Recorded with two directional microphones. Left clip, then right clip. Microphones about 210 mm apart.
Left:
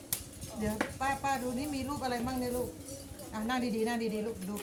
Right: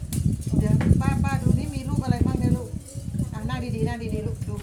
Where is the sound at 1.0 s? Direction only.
5° right (ahead or behind).